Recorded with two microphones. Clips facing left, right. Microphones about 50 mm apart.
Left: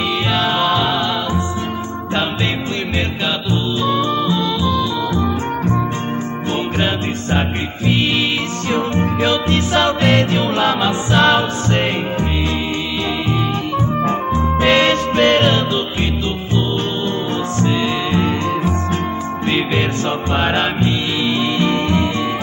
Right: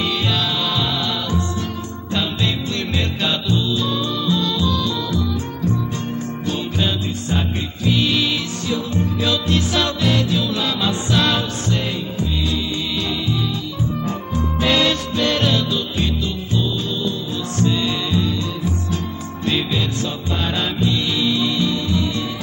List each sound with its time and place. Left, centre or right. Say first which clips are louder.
0.6 s music: left 6 dB; left
3.4 s music: left 2 dB; left
5.2 s music: left 4 dB; left
6.8 s music: left 3 dB; left
10.0 s music: left 4 dB; left
14.0 s music: left 6 dB; left
17.6 s music: left 1 dB; left
20.5 s music: left 3 dB; left